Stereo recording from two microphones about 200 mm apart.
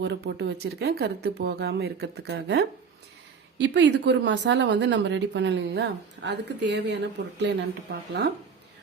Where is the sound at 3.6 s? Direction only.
65° right (ahead or behind).